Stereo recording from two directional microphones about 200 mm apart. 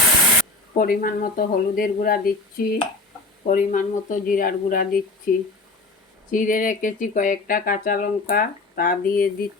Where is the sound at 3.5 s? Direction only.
40° left (ahead or behind).